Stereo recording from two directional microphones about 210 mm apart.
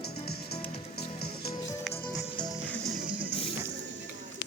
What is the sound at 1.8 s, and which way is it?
Music, 5° left (ahead or behind).